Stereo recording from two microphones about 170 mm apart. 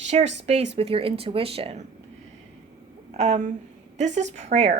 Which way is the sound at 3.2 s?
45° right (ahead or behind).